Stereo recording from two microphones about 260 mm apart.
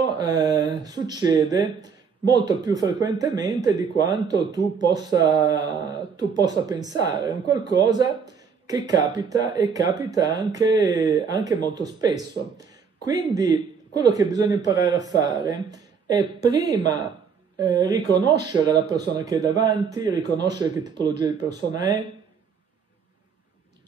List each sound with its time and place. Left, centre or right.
0.0 s speech: centre